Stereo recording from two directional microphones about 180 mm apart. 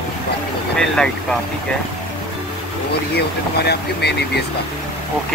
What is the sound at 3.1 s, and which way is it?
Speech, 65° left (ahead or behind).